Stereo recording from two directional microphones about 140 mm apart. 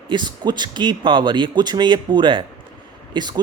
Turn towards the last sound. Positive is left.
turn(degrees=-30)  # may be behind; listen again after turning